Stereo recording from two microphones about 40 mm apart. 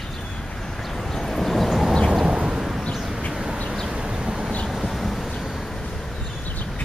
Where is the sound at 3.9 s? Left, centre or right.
Right.